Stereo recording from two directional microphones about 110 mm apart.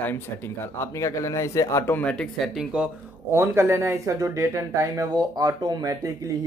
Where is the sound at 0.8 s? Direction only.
30° left (ahead or behind); by 2.9 s 5° right (ahead or behind).